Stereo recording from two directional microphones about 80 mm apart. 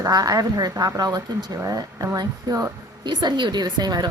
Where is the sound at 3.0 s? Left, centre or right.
Right.